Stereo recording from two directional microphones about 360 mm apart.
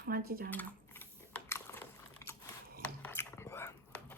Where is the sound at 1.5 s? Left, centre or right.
Centre.